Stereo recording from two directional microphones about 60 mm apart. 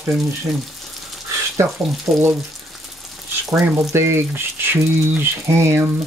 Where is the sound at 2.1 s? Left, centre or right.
Right.